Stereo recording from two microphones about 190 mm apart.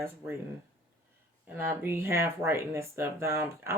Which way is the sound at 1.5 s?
10° right (ahead or behind).